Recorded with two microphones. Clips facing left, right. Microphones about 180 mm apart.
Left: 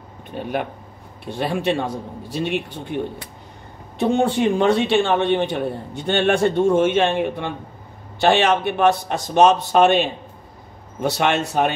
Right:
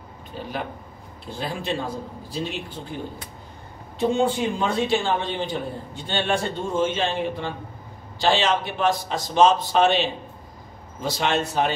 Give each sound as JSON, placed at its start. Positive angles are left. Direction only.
{"t": 0.3, "sound": "a man's voice", "side_deg": 60}
{"t": 1.2, "sound": "a man's voice", "side_deg": 70}
{"t": 4.0, "sound": "a man's voice", "side_deg": 65}
{"t": 11.0, "sound": "a man's voice", "side_deg": 65}